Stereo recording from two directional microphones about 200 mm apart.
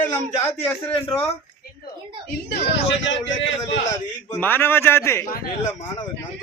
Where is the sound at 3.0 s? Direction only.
70° left (ahead or behind).